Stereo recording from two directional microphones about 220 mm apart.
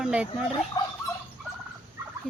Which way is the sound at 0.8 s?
15° left (ahead or behind).